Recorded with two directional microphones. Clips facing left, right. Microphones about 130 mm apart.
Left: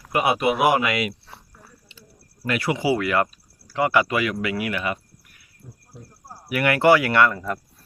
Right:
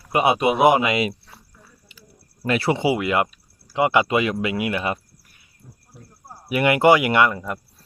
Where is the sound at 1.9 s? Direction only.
25° left (ahead or behind).